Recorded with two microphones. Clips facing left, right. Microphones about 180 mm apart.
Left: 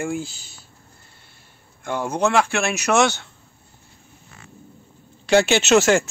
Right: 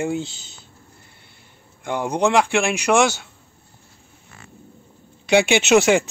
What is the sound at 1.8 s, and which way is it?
A man's voice, 15° right (ahead or behind).